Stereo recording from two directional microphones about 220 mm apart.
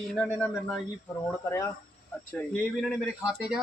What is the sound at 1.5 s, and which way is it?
Speech, 15° left (ahead or behind).